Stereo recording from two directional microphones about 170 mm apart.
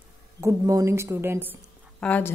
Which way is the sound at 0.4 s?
20° right (ahead or behind).